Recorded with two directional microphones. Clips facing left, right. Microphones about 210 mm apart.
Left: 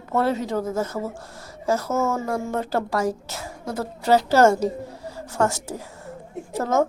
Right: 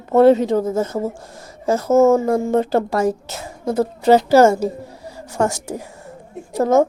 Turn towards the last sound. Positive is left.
turn(degrees=-15)  # may be behind; listen again after turning